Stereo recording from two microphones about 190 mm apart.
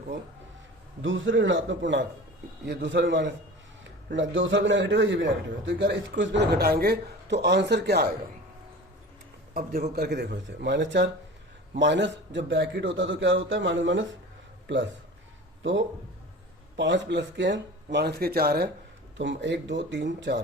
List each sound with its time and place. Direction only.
1.0 s a man's voice: 80° right
4.1 s a man's voice: 80° right; by 8.1 s 60° right (ahead or behind)
9.9 s a man's voice: 60° right (ahead or behind)
16.7 s a man's voice: 70° right (ahead or behind)
19.1 s a man's voice: 75° right (ahead or behind)